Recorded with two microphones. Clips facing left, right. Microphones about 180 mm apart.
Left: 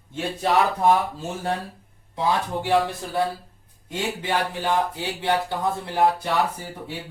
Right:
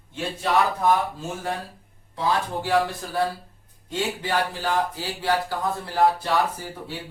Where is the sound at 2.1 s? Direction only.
20° left (ahead or behind).